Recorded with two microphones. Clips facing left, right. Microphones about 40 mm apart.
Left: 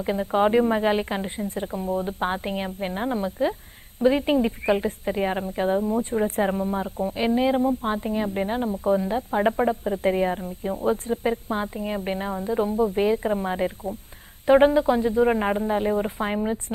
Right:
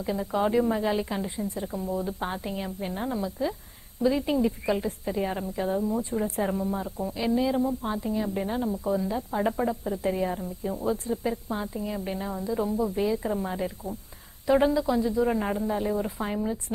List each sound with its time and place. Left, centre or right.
0.0 s a woman's voice: left